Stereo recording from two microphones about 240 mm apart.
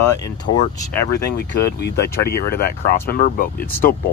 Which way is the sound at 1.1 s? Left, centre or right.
Left.